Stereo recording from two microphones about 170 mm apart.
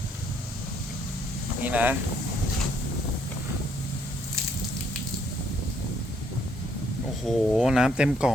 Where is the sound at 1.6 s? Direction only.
10° right (ahead or behind).